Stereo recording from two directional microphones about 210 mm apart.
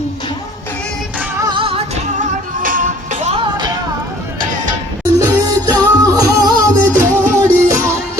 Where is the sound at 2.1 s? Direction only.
40° right (ahead or behind).